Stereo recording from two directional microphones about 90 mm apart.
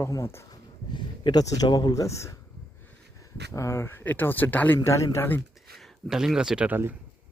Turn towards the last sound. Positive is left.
turn(degrees=-25)  # may be behind; listen again after turning